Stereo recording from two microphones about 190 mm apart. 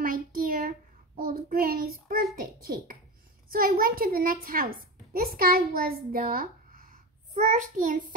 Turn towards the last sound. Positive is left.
turn(degrees=-40)  # may be behind; listen again after turning